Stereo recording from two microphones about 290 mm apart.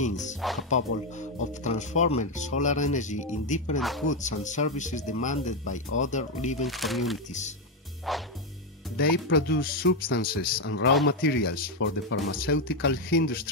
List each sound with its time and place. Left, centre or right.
0.0 s speech: left
0.4 s speech: centre
1.6 s speech: left
6.6 s speech: centre
8.9 s speech: left